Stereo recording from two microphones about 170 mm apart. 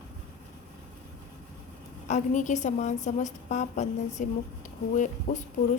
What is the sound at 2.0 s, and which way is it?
A woman's voice, 45° left (ahead or behind).